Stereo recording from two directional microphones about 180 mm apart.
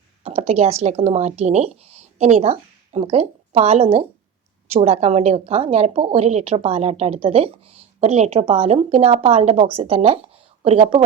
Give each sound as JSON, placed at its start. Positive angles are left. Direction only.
{"t": 0.3, "sound": "a woman's voice", "side_deg": -35}